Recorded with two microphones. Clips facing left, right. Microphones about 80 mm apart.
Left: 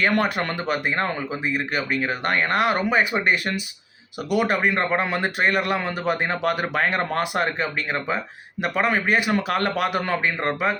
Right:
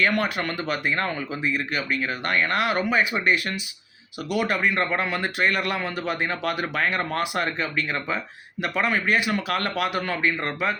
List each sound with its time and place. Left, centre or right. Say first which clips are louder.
0.0 s speech: left 2 dB; left